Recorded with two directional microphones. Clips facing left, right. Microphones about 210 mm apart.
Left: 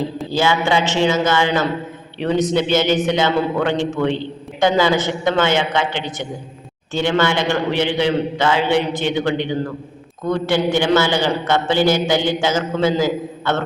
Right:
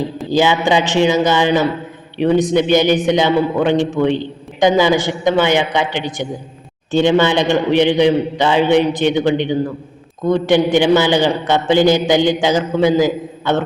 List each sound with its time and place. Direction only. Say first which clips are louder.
0.2 s a man's voice: right 5 dB; 15° right (ahead or behind)